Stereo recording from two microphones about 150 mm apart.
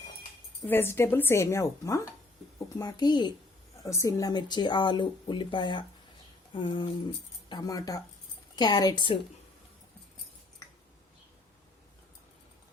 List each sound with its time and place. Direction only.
0.7 s a woman's voice: 15° left (ahead or behind)